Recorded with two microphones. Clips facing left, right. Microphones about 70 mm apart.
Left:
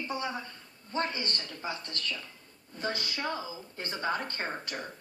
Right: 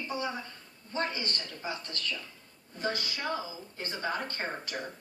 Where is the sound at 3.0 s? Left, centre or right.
Left.